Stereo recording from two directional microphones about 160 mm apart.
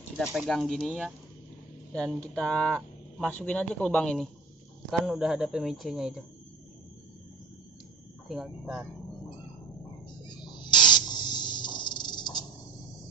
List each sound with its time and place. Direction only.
0.2 s speech: centre (ahead or behind)
8.3 s speech: centre (ahead or behind)
10.2 s snake: 25° left (ahead or behind)